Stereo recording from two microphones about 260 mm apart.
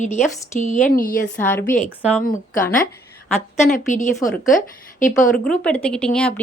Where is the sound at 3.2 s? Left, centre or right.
Centre.